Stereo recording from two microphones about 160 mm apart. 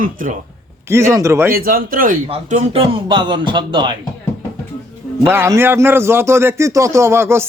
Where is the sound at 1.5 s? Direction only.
65° right (ahead or behind).